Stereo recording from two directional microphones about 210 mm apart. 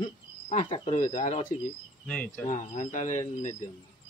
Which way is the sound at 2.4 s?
35° left (ahead or behind).